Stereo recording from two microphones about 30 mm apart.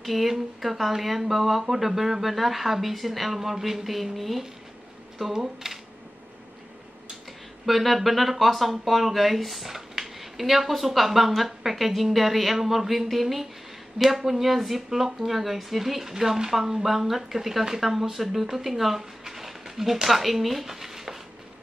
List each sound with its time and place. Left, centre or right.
0.0 s speech: centre
5.3 s speech: centre
7.6 s speech: centre